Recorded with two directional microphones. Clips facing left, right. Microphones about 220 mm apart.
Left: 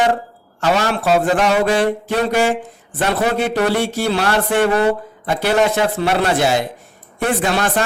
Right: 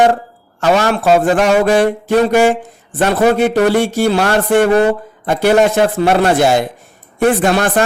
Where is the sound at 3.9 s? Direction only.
50° right (ahead or behind).